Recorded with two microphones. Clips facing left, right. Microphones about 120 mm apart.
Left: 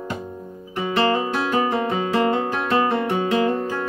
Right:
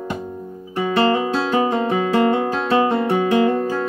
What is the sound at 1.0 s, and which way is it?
Music, 20° right (ahead or behind).